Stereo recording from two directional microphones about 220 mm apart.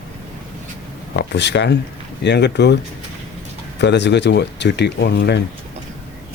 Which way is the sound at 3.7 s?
50° left (ahead or behind).